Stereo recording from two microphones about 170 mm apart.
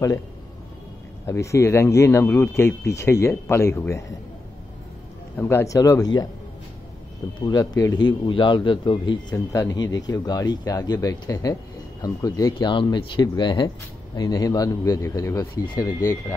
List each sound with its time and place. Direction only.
1.2 s speech: 15° left (ahead or behind)
5.4 s a man's voice: 15° left (ahead or behind)
7.3 s a man's voice: 25° left (ahead or behind)